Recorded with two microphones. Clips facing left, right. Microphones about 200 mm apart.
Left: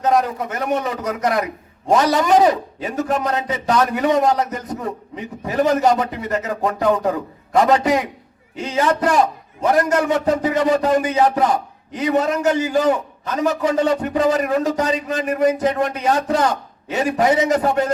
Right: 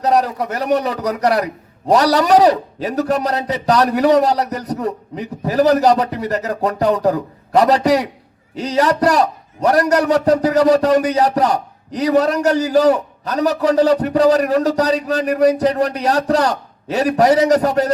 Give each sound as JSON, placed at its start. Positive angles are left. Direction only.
{"t": 0.0, "sound": "a man's voice", "side_deg": -35}